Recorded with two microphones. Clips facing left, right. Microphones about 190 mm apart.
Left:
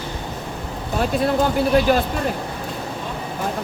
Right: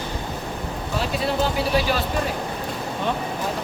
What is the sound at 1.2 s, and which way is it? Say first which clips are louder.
Speech: left 4 dB; 50° left (ahead or behind).